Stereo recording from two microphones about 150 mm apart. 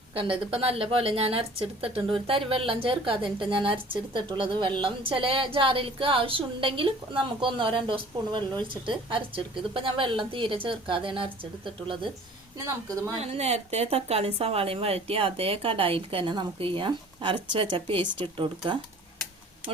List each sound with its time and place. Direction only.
0.1 s a woman's voice: 35° right (ahead or behind)
12.9 s speech: 20° right (ahead or behind)
13.1 s a woman's voice: 45° right (ahead or behind)